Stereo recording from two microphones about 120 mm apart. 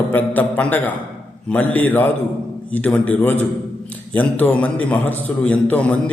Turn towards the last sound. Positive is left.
turn(degrees=10)  # may be behind; listen again after turning